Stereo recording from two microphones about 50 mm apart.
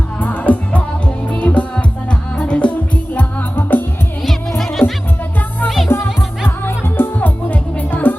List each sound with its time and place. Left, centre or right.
0.2 s music: left
3.2 s music: left
4.3 s music: centre
6.7 s music: left
7.2 s music: left